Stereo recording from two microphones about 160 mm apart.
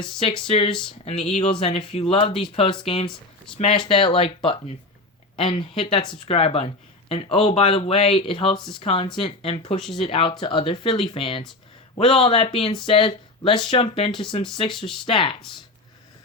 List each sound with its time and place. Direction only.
0.0 s speech: 30° left (ahead or behind)
0.7 s speech: 5° left (ahead or behind)
1.3 s speech: 35° left (ahead or behind)
3.1 s speech: 5° left (ahead or behind)
3.6 s speech: 35° left (ahead or behind)